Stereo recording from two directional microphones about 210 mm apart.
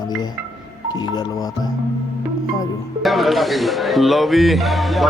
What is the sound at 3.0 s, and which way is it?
Speech, centre (ahead or behind).